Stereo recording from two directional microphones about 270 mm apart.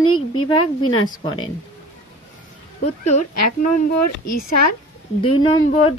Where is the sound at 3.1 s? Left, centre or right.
Left.